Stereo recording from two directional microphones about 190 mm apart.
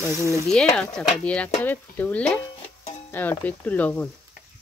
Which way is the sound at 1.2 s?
5° left (ahead or behind).